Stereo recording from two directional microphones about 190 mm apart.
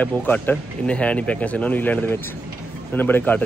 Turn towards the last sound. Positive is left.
turn(degrees=10)  # may be behind; listen again after turning